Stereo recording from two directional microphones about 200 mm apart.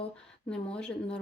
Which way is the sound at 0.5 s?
5° left (ahead or behind).